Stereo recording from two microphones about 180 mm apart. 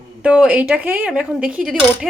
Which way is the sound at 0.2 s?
5° right (ahead or behind).